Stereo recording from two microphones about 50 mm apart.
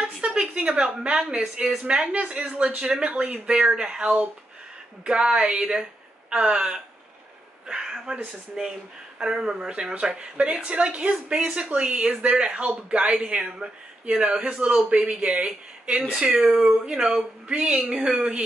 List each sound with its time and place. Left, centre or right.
0.0 s a sound: centre
1.4 s speech: centre; by 4.3 s right
5.0 s speech: centre
16.2 s speech: centre